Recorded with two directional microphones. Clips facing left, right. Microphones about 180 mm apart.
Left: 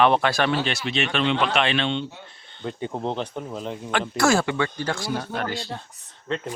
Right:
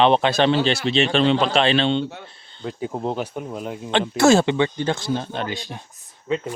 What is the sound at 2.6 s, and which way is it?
Speech, centre (ahead or behind).